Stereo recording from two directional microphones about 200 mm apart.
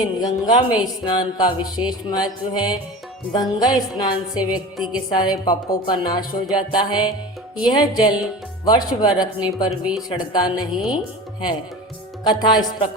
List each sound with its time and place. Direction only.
0.2 s speech: 20° left (ahead or behind)
4.5 s a woman's voice: 5° right (ahead or behind)
5.1 s speech: 20° left (ahead or behind)
12.2 s speech: 20° left (ahead or behind)